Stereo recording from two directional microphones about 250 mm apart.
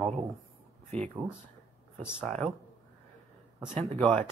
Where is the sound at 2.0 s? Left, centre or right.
Centre.